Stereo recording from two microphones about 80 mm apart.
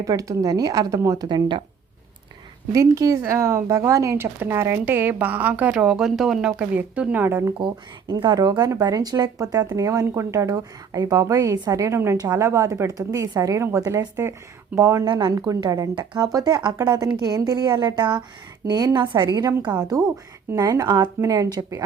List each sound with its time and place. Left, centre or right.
0.0 s speech: right
2.7 s speech: right
4.2 s speech: right; by 6.7 s centre
6.7 s speech: centre
7.3 s speech: right
8.2 s a woman's voice: right
14.8 s speech: right
15.0 s a woman's voice: right
16.9 s a woman's voice: right
18.6 s a woman's voice: right
19.3 s a woman's voice: right